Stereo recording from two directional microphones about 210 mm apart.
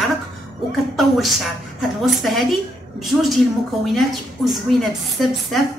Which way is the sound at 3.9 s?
Centre (ahead or behind).